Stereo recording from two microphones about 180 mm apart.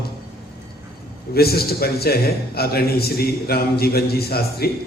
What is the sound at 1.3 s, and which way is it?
A man's voice, 60° left (ahead or behind).